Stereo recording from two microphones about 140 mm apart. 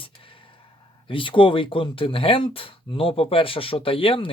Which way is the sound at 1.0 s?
40° left (ahead or behind).